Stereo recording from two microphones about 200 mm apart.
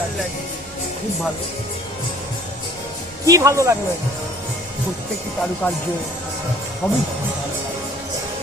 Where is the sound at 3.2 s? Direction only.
15° right (ahead or behind).